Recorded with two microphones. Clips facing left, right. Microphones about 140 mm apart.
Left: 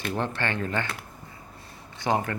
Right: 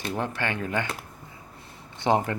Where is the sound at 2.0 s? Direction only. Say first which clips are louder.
Right 3 dB; 20° right (ahead or behind).